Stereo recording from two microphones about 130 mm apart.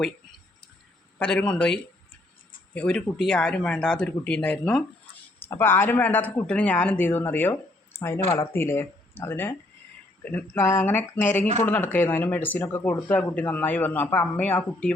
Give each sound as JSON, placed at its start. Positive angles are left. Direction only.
{"t": 1.2, "sound": "speech", "side_deg": 10}